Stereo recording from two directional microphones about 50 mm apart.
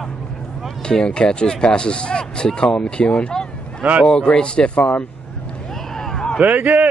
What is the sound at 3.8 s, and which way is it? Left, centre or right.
Speech, right.